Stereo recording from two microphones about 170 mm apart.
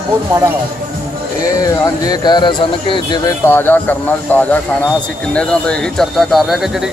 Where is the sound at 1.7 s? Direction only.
20° left (ahead or behind).